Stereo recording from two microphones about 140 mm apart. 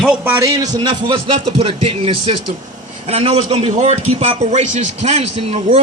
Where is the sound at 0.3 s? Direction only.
25° right (ahead or behind).